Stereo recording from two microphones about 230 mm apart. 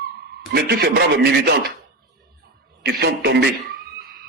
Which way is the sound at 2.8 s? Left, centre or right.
Right.